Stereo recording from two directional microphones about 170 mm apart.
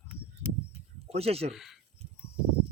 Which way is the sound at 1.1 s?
35° right (ahead or behind).